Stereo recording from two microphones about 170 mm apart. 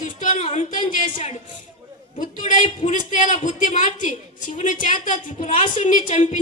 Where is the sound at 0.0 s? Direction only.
50° left (ahead or behind).